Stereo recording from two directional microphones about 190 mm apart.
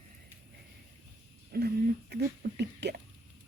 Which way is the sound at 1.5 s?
55° right (ahead or behind).